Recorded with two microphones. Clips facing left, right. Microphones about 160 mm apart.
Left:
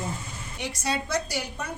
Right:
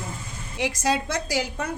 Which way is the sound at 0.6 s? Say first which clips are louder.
Right 6 dB; 90° right.